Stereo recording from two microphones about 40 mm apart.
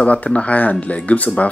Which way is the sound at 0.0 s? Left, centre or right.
Left.